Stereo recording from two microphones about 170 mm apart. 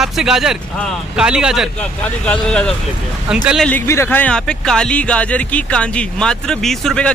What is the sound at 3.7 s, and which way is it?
Speech, 15° left (ahead or behind).